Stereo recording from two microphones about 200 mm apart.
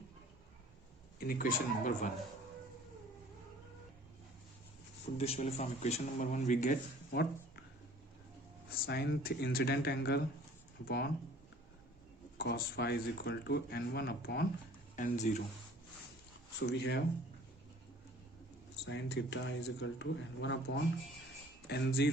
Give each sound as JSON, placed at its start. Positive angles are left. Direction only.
{"t": 1.2, "sound": "speech", "side_deg": 45}
{"t": 5.1, "sound": "speech", "side_deg": 30}
{"t": 8.7, "sound": "speech", "side_deg": 55}
{"t": 12.4, "sound": "speech", "side_deg": 55}
{"t": 14.9, "sound": "speech", "side_deg": 40}
{"t": 16.6, "sound": "speech", "side_deg": 60}
{"t": 18.9, "sound": "speech", "side_deg": 60}